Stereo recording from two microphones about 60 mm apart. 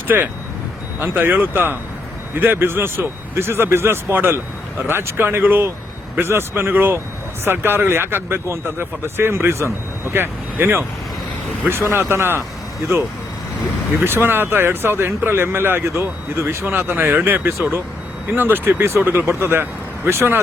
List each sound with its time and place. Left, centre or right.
0.9 s speech: right
14.0 s speech: right
16.4 s speech: right
16.6 s speech: right